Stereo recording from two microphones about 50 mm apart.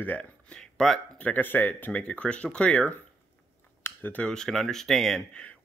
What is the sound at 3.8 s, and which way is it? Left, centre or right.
Cutlery, left.